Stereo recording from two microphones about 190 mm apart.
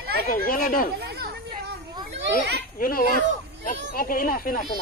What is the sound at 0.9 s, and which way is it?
Chatter, 55° right (ahead or behind).